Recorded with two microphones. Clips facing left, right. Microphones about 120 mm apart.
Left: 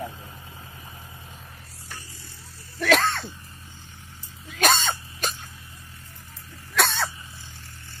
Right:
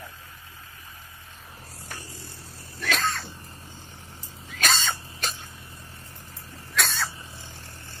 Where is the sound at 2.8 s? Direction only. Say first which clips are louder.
Left 7 dB; 70° left (ahead or behind).